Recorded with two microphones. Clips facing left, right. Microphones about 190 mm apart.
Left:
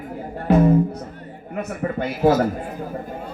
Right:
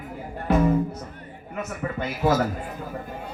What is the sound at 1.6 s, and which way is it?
Speech, 35° left (ahead or behind).